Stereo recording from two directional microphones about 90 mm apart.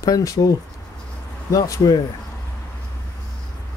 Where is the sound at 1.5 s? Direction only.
40° left (ahead or behind).